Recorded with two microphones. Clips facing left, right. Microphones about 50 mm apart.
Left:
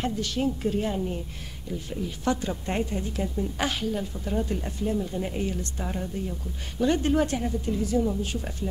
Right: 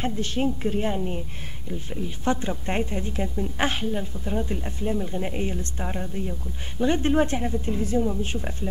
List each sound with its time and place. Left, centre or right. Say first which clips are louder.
0.0 s speech: right 1 dB; right
4.2 s speech: even; centre